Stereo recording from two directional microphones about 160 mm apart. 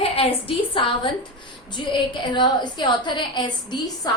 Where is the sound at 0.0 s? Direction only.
35° left (ahead or behind).